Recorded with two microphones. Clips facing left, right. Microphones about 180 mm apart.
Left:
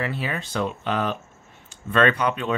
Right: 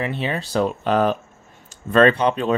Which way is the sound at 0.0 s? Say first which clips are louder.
Right 3 dB; 25° right (ahead or behind).